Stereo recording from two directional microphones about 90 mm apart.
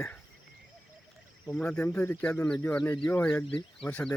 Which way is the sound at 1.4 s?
10° left (ahead or behind).